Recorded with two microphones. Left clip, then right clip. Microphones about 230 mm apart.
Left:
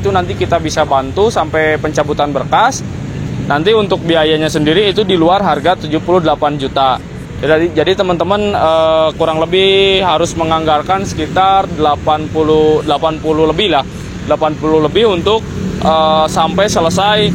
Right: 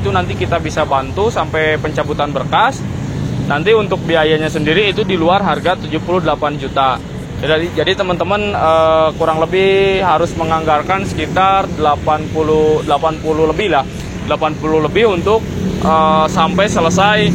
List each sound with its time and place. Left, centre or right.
0.1 s speech: left
7.4 s speech: left